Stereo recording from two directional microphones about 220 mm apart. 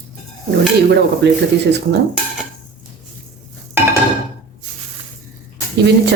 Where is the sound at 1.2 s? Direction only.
50° right (ahead or behind).